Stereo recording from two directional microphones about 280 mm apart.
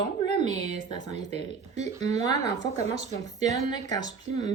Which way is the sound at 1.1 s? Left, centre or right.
Right.